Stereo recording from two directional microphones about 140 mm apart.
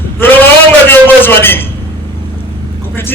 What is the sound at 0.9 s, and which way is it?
Speech, 15° left (ahead or behind).